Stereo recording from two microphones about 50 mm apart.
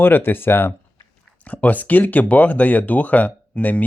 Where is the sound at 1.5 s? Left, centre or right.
Left.